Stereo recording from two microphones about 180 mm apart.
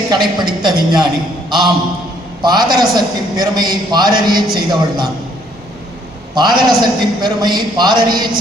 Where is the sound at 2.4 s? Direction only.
25° right (ahead or behind).